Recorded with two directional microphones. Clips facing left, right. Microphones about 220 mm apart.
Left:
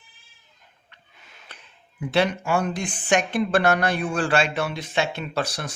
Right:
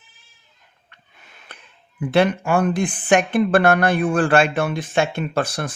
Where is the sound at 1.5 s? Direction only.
55° right (ahead or behind).